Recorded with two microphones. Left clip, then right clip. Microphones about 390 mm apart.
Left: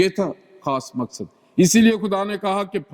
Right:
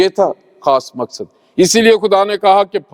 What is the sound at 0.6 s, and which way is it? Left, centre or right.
A man's voice, right.